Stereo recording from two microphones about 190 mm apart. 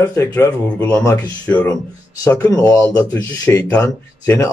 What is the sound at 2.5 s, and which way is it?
A man's voice, 20° left (ahead or behind).